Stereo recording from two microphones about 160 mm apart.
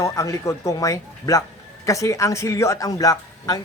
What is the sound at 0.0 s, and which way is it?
Speech, 20° left (ahead or behind).